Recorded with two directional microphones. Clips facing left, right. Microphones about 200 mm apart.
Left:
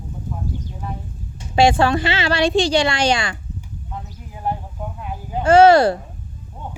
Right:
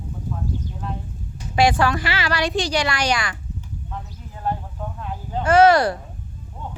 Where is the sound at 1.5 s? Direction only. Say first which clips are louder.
Left 3 dB; 25° left (ahead or behind).